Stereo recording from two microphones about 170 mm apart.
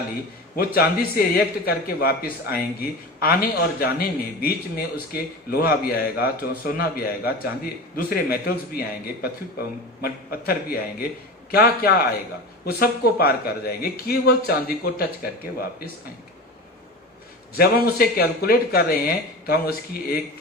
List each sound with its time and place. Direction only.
0.6 s a man's voice: 65° left (ahead or behind)
17.6 s a man's voice: 65° left (ahead or behind)